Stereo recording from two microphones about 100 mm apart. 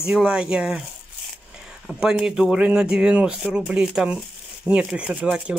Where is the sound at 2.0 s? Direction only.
5° right (ahead or behind).